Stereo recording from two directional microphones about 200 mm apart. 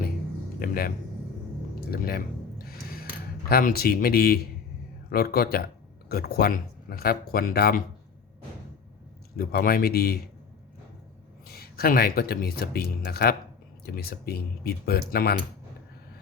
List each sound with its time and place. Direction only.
0.6 s speech: 45° left (ahead or behind)
1.9 s a sound: 50° left (ahead or behind)
3.5 s speech: 45° left (ahead or behind)
9.3 s speech: 50° left (ahead or behind)
11.4 s speech: 50° left (ahead or behind)